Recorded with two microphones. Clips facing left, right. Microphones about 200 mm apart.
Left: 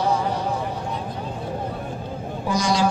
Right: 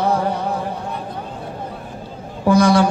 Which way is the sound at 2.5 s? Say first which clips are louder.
Right 9 dB; 60° right (ahead or behind).